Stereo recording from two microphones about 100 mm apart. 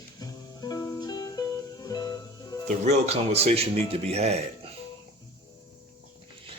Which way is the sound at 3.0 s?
90° right.